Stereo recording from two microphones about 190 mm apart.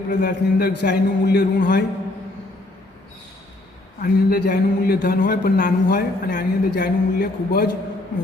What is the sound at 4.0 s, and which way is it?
A man's voice, 50° left (ahead or behind).